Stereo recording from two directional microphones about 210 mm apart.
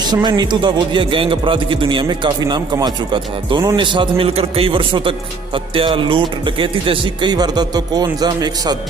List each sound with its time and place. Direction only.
0.0 s speech: 20° right (ahead or behind)